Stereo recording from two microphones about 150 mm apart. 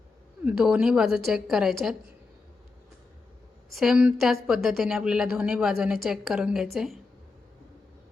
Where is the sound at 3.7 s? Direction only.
Centre (ahead or behind).